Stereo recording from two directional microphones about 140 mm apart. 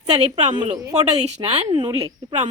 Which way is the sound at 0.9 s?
50° right (ahead or behind).